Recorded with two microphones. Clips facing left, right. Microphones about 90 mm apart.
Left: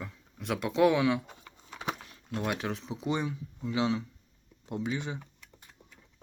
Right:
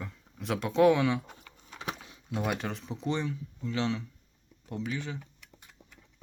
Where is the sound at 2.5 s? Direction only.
Centre (ahead or behind).